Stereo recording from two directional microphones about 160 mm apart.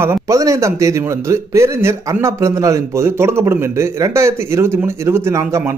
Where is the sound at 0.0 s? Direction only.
20° right (ahead or behind).